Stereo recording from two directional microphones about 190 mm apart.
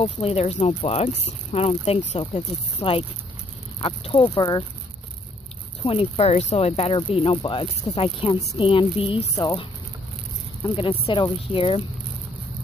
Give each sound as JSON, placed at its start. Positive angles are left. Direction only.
{"t": 0.0, "sound": "speech", "side_deg": 30}
{"t": 5.9, "sound": "speech", "side_deg": 30}
{"t": 10.6, "sound": "speech", "side_deg": 25}